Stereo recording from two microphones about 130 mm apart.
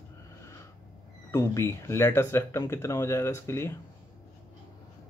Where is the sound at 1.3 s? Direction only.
25° left (ahead or behind).